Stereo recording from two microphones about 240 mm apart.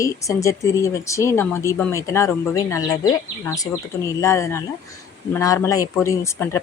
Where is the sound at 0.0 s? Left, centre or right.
Centre.